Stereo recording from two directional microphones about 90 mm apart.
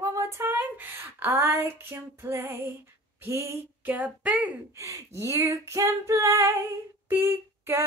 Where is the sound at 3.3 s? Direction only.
30° right (ahead or behind).